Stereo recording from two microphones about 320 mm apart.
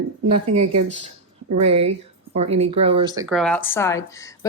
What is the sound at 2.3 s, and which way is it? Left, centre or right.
Speech, centre.